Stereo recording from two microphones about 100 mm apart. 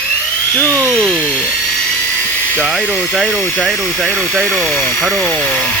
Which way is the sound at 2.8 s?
20° left (ahead or behind).